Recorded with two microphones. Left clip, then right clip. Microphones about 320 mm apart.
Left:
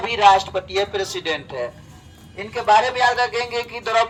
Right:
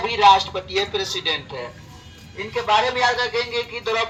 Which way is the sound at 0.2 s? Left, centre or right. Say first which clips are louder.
Even; centre.